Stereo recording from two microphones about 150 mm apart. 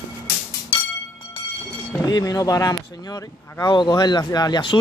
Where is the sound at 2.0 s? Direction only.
25° left (ahead or behind).